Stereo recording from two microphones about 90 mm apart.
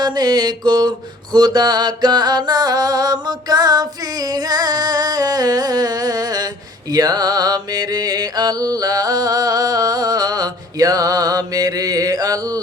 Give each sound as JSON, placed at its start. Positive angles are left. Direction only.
{"t": 0.0, "sound": "mantra", "side_deg": -50}
{"t": 6.9, "sound": "music", "side_deg": -45}